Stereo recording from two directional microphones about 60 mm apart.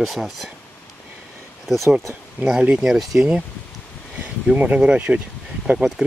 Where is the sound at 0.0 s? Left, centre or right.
Centre.